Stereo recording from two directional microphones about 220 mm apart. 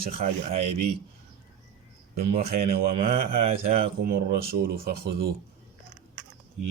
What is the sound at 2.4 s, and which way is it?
Speech, 45° right (ahead or behind).